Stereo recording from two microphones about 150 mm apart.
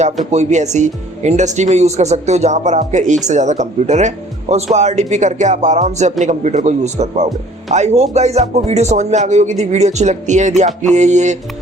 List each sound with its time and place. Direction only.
0.3 s speech: 50° right (ahead or behind)